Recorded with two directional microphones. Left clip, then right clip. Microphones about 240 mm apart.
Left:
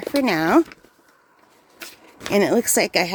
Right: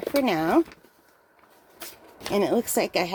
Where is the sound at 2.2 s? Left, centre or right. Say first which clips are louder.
Left 5 dB; left.